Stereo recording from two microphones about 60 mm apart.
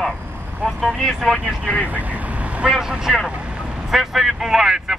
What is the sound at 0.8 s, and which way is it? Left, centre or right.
Speech, centre.